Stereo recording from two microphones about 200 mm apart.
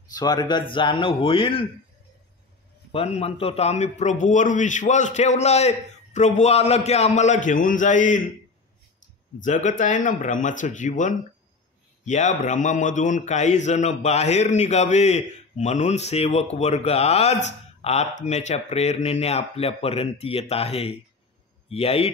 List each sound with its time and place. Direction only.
0.1 s a man's voice: 20° left (ahead or behind)
3.2 s a man's voice: 30° left (ahead or behind)
9.4 s a man's voice: 40° left (ahead or behind)